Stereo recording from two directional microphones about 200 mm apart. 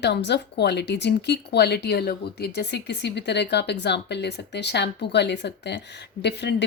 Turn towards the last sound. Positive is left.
turn(degrees=60)  # may be behind; listen again after turning